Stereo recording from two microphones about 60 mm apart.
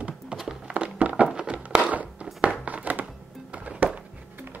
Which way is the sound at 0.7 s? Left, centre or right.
Right.